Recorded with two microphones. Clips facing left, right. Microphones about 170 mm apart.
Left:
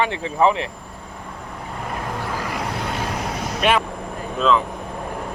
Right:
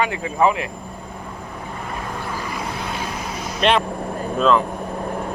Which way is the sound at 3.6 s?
5° left (ahead or behind).